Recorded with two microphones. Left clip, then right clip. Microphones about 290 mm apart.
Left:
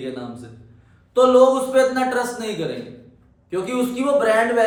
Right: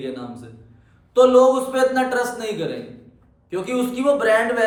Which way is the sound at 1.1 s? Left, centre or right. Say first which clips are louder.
Even; centre.